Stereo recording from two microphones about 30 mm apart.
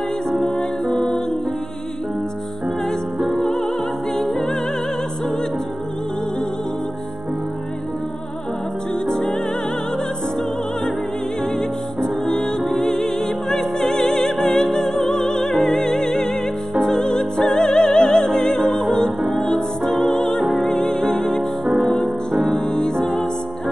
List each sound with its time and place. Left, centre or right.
0.5 s music: left
3.3 s music: centre
9.0 s music: centre
11.4 s music: left
19.5 s music: centre
20.2 s music: left
22.5 s music: left